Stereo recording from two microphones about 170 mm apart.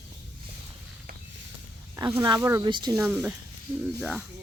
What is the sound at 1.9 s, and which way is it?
Speech, 20° right (ahead or behind).